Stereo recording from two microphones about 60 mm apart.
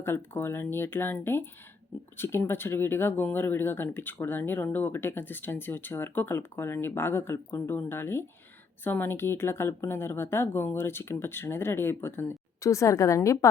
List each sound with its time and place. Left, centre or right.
0.0 s speech: left
12.5 s a woman's voice: left